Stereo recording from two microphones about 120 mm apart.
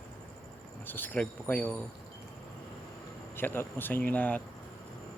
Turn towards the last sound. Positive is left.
turn(degrees=10)  # may be behind; listen again after turning